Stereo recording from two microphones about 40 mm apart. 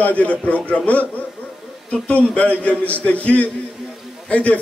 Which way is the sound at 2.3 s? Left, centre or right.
Left.